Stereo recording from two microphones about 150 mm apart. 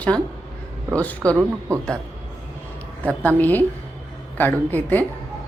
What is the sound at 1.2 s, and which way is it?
Speech, 20° right (ahead or behind).